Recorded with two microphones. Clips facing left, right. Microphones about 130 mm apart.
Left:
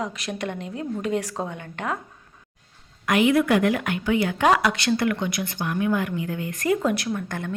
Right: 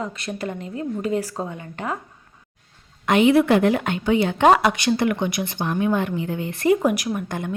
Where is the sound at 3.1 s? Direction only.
25° right (ahead or behind).